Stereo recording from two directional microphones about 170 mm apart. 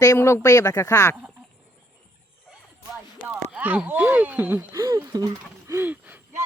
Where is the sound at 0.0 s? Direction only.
20° left (ahead or behind).